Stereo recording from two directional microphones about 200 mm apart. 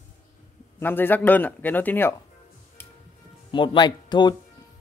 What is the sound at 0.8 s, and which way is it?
Speech, 10° left (ahead or behind).